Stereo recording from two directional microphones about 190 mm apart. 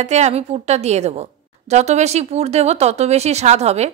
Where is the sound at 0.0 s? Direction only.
35° right (ahead or behind).